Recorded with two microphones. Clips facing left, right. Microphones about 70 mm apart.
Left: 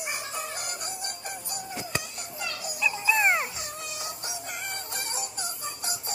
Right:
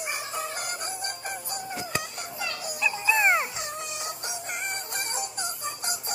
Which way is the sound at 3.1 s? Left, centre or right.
Right.